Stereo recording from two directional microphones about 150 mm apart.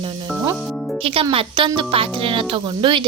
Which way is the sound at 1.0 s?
40° right (ahead or behind).